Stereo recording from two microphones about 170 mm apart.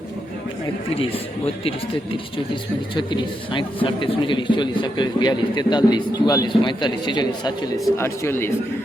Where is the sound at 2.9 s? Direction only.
30° left (ahead or behind).